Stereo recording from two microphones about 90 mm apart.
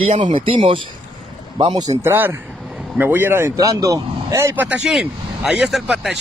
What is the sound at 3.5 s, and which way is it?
Speech, 40° right (ahead or behind).